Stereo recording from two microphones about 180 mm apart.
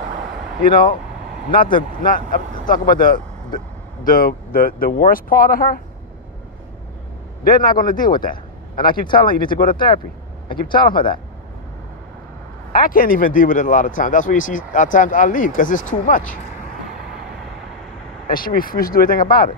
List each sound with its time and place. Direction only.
0.7 s speech: 25° left (ahead or behind)
2.0 s speech: 50° left (ahead or behind)
7.4 s speech: 50° left (ahead or behind)
8.2 s a sound: 50° left (ahead or behind)
9.1 s speech: 50° left (ahead or behind)
9.5 s speech: 25° left (ahead or behind)
10.9 s speech: 25° left (ahead or behind)
12.7 s speech: 50° left (ahead or behind)
18.2 s speech: 50° left (ahead or behind)